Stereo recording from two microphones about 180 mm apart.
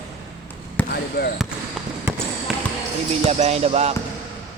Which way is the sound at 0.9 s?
60° left (ahead or behind).